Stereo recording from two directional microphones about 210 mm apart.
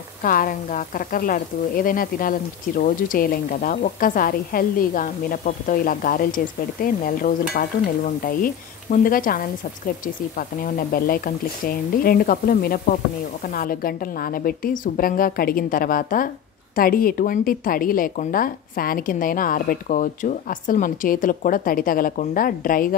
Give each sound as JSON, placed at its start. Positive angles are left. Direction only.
{"t": 0.2, "sound": "speech", "side_deg": 40}